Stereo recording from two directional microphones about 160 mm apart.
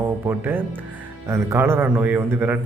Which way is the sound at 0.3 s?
10° right (ahead or behind).